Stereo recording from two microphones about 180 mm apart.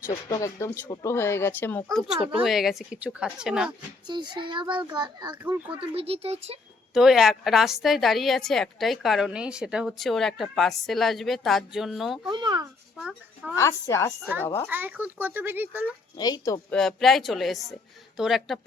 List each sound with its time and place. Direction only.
0.3 s a woman's voice: 20° left (ahead or behind); by 3.7 s 5° right (ahead or behind)
4.0 s a child's voice: 25° right (ahead or behind)
6.9 s a woman's voice: centre (ahead or behind)
12.3 s a child's voice: 25° right (ahead or behind)
13.0 s a child's voice: 5° right (ahead or behind)
13.6 s speech: 15° left (ahead or behind)
14.7 s speech: 10° right (ahead or behind)
16.1 s a woman's voice: 20° left (ahead or behind)
16.7 s a woman's voice: centre (ahead or behind)